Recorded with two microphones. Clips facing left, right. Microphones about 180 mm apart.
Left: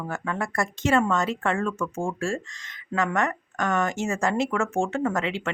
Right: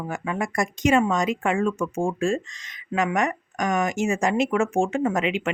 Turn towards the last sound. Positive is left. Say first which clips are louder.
# right 3 dB
turn(degrees=-15)  # may be behind; listen again after turning